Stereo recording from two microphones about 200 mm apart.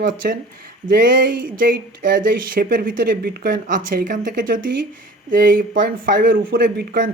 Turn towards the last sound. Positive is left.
turn(degrees=-45)  # may be behind; listen again after turning